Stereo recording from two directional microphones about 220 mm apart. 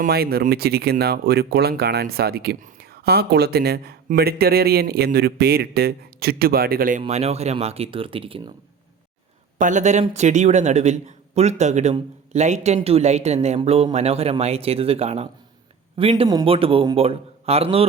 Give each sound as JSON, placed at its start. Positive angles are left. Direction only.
{"t": 0.0, "sound": "speech", "side_deg": -45}
{"t": 7.0, "sound": "a man's voice", "side_deg": -30}
{"t": 9.6, "sound": "a man's voice", "side_deg": -35}